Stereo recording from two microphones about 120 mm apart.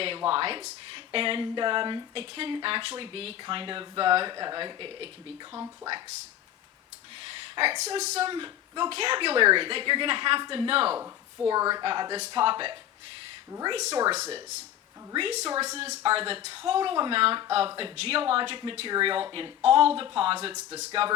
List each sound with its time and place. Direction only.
0.0 s speech: 50° right (ahead or behind)
5.5 s speech: 30° right (ahead or behind)
7.2 s a sound: 50° right (ahead or behind)
7.9 s speech: 65° right (ahead or behind)
8.3 s speech: 40° right (ahead or behind)
11.4 s speech: 35° right (ahead or behind)
13.5 s speech: 35° right (ahead or behind)
14.1 s speech: 55° right (ahead or behind)
15.6 s speech: 60° right (ahead or behind)